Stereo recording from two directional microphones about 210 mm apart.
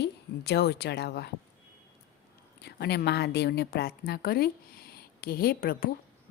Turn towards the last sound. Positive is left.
turn(degrees=45)  # may be behind; listen again after turning